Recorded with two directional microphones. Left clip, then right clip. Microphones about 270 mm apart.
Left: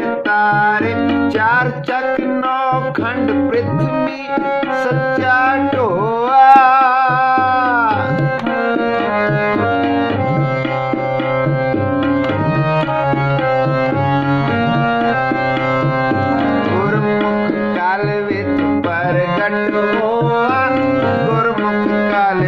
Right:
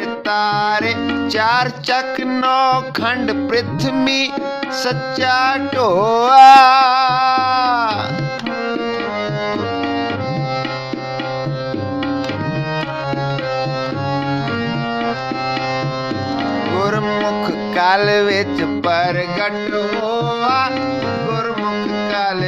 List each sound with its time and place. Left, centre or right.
0.4 s music: right
5.3 s music: right